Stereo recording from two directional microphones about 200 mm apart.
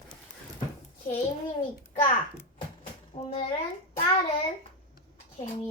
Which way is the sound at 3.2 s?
30° left (ahead or behind).